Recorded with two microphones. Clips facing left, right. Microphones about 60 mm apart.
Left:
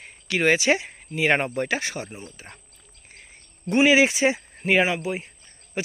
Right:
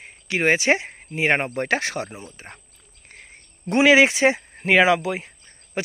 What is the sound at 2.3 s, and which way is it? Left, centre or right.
Speech, right.